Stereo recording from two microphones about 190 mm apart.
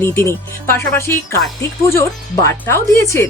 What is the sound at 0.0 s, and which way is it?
Speech, 15° left (ahead or behind).